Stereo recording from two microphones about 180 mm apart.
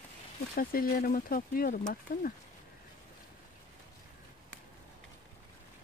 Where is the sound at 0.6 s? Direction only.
55° left (ahead or behind).